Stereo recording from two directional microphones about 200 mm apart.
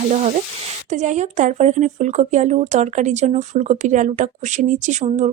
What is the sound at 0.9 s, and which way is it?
Speech, 35° right (ahead or behind).